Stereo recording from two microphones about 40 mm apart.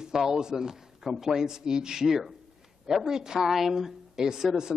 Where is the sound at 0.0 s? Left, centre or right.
Centre.